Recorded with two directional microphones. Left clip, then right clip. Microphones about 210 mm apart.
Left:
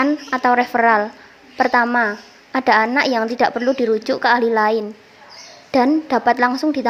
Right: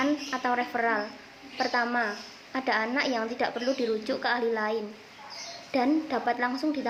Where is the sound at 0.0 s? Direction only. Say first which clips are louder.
Left 11 dB; 40° left (ahead or behind).